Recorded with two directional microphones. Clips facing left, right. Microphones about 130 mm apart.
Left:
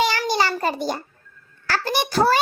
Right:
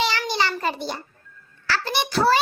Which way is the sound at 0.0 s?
45° left (ahead or behind).